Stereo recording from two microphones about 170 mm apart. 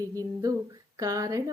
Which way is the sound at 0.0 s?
20° right (ahead or behind).